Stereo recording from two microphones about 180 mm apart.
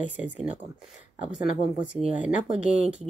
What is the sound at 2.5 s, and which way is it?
Speech, 35° right (ahead or behind).